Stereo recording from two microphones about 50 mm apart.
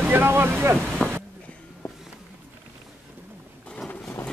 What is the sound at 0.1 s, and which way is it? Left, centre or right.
Speech, right.